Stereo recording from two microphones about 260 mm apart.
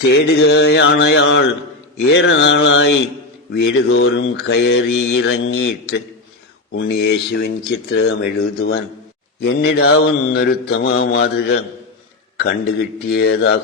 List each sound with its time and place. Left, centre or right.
0.1 s mantra: left
6.7 s mantra: left